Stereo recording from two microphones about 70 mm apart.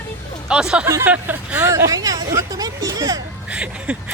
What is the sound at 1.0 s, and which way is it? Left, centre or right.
Speech, right.